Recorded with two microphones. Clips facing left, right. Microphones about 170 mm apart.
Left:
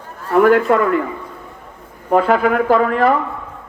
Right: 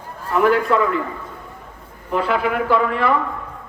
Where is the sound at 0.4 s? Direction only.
50° left (ahead or behind).